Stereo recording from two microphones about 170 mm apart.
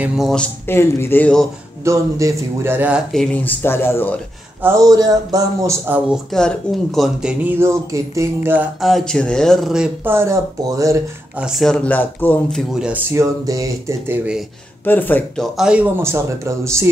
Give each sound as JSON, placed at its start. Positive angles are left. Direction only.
{"t": 0.0, "sound": "speech", "side_deg": 0}
{"t": 1.9, "sound": "speech", "side_deg": -20}
{"t": 3.1, "sound": "speech", "side_deg": 5}
{"t": 4.6, "sound": "speech", "side_deg": -15}
{"t": 6.0, "sound": "speech", "side_deg": 5}
{"t": 8.8, "sound": "speech", "side_deg": 0}
{"t": 11.3, "sound": "speech", "side_deg": -5}
{"t": 13.1, "sound": "speech", "side_deg": -20}
{"t": 14.9, "sound": "speech", "side_deg": 10}